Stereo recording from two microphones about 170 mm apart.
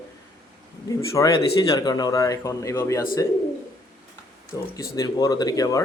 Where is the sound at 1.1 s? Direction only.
20° left (ahead or behind).